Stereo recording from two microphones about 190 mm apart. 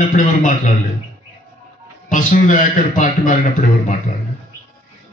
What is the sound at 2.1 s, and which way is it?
A man's voice, 45° left (ahead or behind).